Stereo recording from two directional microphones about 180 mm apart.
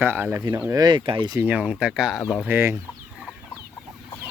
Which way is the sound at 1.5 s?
5° right (ahead or behind).